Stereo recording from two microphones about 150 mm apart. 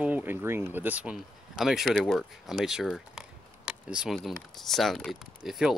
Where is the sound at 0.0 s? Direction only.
10° right (ahead or behind).